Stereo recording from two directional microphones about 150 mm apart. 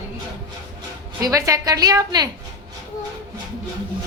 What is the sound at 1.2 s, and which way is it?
A woman's voice, 20° right (ahead or behind).